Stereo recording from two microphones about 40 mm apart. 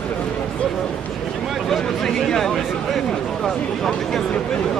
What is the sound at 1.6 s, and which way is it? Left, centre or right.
Speech, centre.